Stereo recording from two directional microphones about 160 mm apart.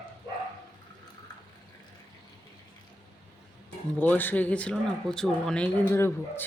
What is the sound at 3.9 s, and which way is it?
Speech, 10° left (ahead or behind).